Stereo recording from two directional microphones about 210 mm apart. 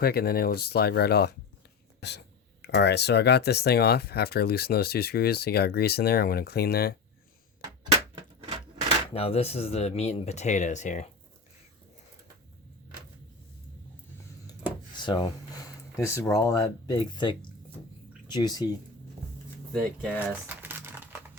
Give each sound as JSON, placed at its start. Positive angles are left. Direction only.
{"t": 0.0, "sound": "speech", "side_deg": 45}
{"t": 8.1, "sound": "a sound", "side_deg": -25}
{"t": 9.1, "sound": "speech", "side_deg": 30}
{"t": 14.9, "sound": "speech", "side_deg": 20}
{"t": 19.7, "sound": "speech", "side_deg": 0}
{"t": 20.1, "sound": "crumpling", "side_deg": -10}